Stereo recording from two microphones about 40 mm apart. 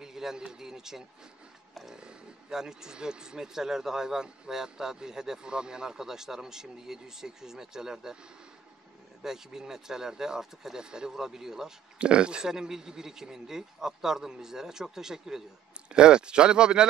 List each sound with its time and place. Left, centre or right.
0.0 s a sound: centre
0.5 s speech: centre
1.7 s a sound: centre
2.0 s speech: centre
9.2 s speech: centre
12.0 s speech: right
15.9 s speech: right